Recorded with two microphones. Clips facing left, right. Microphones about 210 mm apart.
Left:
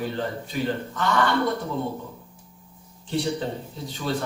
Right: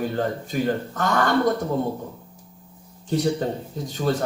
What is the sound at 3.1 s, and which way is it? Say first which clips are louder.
Speech: right 4 dB; 45° right (ahead or behind).